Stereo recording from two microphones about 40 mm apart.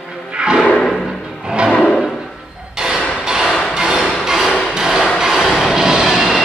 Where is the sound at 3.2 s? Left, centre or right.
Centre.